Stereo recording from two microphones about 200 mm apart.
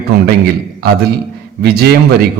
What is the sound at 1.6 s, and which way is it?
Speech, 55° right (ahead or behind).